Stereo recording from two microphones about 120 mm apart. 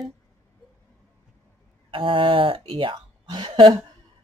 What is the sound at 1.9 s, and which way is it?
A man's voice, 45° right (ahead or behind).